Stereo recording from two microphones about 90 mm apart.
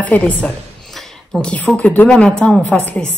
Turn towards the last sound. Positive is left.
turn(degrees=15)  # may be behind; listen again after turning